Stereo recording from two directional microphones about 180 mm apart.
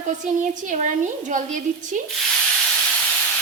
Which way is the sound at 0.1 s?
45° right (ahead or behind).